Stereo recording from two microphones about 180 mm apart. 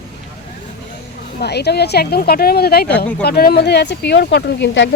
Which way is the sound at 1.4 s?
65° left (ahead or behind).